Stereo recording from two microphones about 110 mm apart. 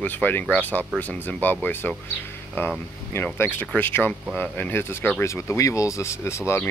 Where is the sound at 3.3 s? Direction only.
20° left (ahead or behind).